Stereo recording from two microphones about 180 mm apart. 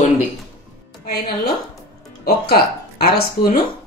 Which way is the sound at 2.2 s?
60° left (ahead or behind).